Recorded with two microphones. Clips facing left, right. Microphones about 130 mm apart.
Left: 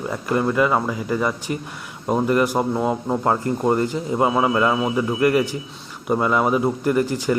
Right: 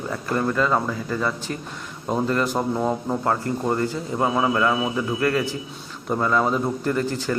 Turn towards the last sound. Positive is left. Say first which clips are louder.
# left 4 dB
turn(degrees=15)  # may be behind; listen again after turning